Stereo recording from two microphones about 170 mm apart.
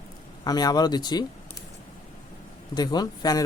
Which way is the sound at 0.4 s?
25° left (ahead or behind).